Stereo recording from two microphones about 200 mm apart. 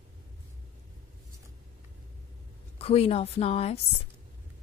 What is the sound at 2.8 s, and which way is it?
A woman's voice, 30° left (ahead or behind).